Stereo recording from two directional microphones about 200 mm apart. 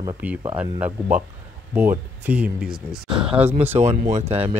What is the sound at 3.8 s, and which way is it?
Speech, 35° right (ahead or behind).